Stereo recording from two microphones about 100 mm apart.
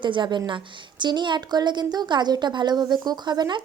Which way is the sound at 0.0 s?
50° right (ahead or behind).